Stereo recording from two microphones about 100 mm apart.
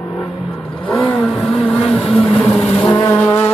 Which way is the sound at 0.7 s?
10° left (ahead or behind).